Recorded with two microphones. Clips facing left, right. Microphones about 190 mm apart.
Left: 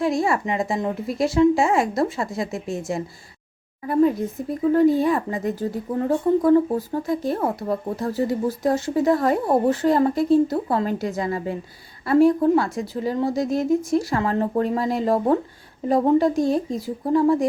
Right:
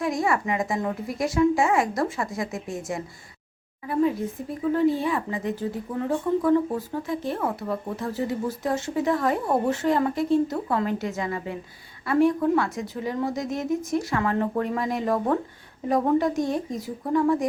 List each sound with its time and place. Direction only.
0.0 s a woman's voice: 30° left (ahead or behind)
4.7 s a woman's voice: 40° left (ahead or behind)